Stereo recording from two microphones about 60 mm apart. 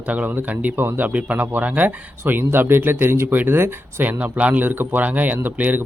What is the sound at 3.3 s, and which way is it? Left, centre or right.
Speech, right.